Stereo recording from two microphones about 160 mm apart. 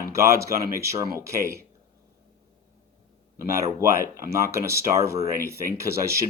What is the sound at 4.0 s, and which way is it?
Speech, 15° right (ahead or behind).